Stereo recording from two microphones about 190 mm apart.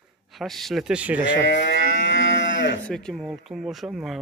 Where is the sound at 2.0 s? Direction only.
85° left.